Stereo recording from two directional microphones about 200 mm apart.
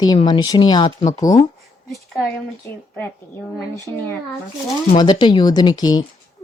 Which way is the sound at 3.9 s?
15° left (ahead or behind).